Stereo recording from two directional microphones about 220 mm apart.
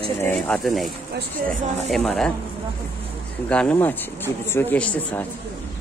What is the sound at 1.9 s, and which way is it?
Speech, 5° left (ahead or behind).